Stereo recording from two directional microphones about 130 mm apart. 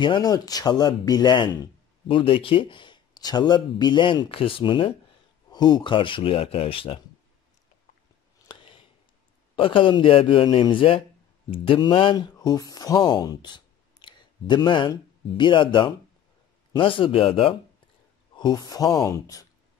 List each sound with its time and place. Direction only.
0.0 s speech: 35° left (ahead or behind)
8.5 s a sound: 40° left (ahead or behind)
9.6 s speech: 40° left (ahead or behind)
18.3 s speech: 35° left (ahead or behind)